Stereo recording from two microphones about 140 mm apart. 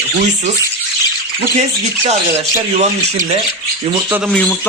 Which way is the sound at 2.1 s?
50° right (ahead or behind).